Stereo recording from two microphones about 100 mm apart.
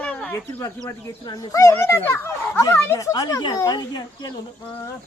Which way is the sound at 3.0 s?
35° left (ahead or behind).